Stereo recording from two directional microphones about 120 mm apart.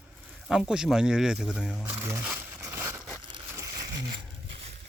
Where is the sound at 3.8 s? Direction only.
35° right (ahead or behind).